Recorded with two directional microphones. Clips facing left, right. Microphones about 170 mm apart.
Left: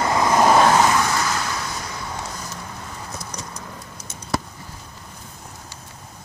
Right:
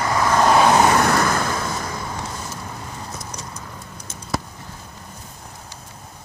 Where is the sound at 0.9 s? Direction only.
60° right (ahead or behind).